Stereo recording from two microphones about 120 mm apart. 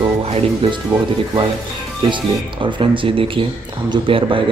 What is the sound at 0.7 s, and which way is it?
Speech, 40° right (ahead or behind).